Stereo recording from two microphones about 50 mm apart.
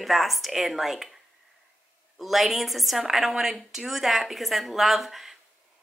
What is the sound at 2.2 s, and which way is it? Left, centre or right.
Speech, centre.